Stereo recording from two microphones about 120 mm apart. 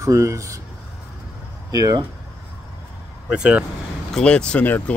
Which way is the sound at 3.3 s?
10° right (ahead or behind).